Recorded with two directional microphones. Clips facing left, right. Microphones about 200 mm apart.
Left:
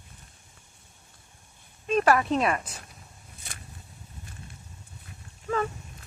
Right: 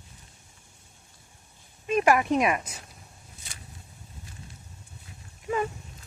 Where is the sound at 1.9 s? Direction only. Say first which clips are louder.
Even; 10° right (ahead or behind).